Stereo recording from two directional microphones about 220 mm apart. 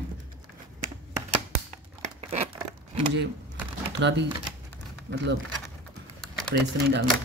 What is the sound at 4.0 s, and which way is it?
Speech, 55° right (ahead or behind).